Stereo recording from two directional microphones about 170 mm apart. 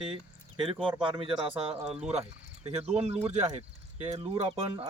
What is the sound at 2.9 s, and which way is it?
Speech, 40° right (ahead or behind).